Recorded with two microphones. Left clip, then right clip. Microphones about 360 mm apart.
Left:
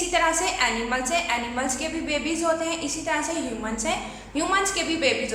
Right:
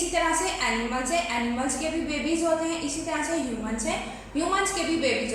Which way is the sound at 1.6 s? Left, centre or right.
Left.